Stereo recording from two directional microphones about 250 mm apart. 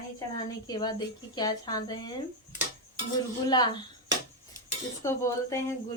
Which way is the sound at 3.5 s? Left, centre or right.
Centre.